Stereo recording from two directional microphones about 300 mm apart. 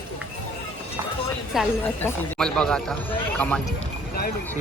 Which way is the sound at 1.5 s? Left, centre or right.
Centre.